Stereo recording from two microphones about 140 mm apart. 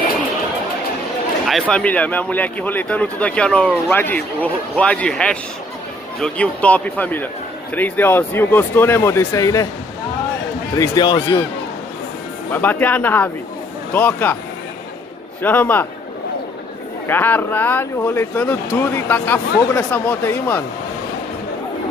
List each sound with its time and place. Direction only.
1.5 s speech: 5° left (ahead or behind); by 9.7 s 25° left (ahead or behind)
10.8 s speech: 30° left (ahead or behind)
12.4 s speech: 15° left (ahead or behind)
15.4 s speech: 15° left (ahead or behind)
17.1 s speech: 15° left (ahead or behind)